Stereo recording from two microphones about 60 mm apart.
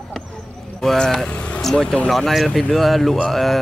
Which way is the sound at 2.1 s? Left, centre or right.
Centre.